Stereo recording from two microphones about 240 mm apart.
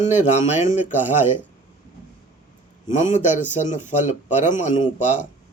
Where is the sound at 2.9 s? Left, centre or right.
Left.